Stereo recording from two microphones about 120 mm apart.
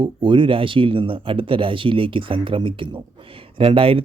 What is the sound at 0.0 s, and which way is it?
Speech, 45° right (ahead or behind).